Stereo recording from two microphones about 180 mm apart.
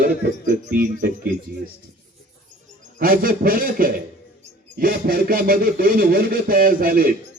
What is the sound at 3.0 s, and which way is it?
A man's voice, 55° right (ahead or behind).